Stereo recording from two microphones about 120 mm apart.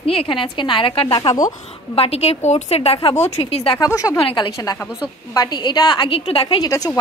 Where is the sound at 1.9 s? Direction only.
60° left (ahead or behind).